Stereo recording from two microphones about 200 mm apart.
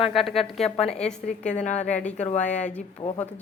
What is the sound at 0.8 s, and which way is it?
Speech, 30° left (ahead or behind).